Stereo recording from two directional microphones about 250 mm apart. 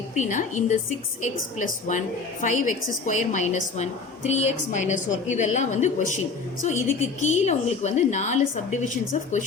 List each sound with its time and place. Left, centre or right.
0.2 s a woman's voice: left